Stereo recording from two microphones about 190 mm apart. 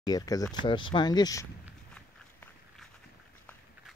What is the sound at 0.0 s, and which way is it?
Speech, 20° left (ahead or behind).